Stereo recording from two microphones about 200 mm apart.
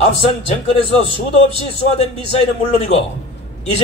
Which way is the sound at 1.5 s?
30° left (ahead or behind).